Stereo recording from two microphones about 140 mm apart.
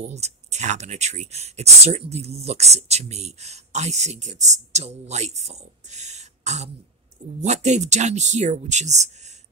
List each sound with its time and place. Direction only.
0.0 s speech: 50° right (ahead or behind)